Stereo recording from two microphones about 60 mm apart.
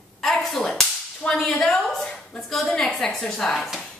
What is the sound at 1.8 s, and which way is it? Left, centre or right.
A woman's voice, centre.